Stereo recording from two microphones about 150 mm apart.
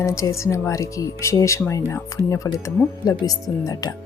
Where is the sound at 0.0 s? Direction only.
20° left (ahead or behind).